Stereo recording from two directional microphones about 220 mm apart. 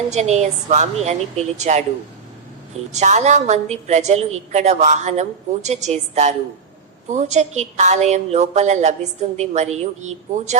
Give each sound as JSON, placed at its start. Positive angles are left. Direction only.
{"t": 0.1, "sound": "a woman's voice", "side_deg": -30}
{"t": 2.9, "sound": "a woman's voice", "side_deg": -30}